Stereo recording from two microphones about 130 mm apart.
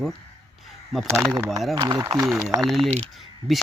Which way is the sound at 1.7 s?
30° right (ahead or behind).